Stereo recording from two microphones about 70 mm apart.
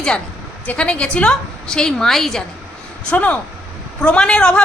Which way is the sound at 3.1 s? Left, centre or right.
Left.